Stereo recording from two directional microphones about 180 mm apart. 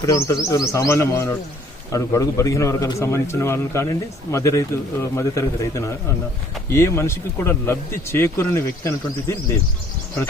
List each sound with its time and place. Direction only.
0.0 s a man's voice: 20° left (ahead or behind)